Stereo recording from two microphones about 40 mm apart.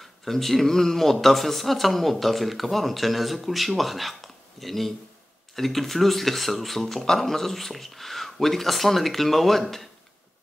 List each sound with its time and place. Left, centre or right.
0.0 s speech: centre